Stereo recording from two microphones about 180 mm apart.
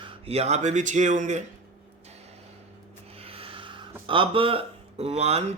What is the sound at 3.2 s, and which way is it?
Speech, 30° right (ahead or behind).